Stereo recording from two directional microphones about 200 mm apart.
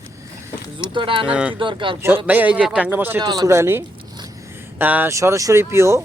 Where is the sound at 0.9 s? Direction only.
25° right (ahead or behind).